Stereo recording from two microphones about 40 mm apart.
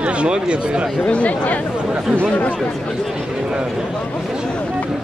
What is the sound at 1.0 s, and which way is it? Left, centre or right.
Speech, left.